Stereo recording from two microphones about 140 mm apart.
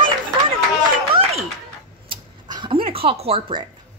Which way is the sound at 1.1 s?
50° right (ahead or behind).